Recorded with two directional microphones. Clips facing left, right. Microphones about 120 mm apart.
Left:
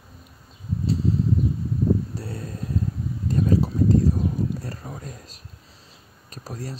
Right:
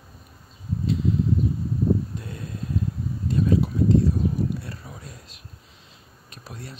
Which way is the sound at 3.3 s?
40° left (ahead or behind).